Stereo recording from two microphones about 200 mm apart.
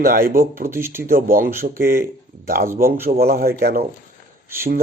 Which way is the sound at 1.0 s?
45° right (ahead or behind).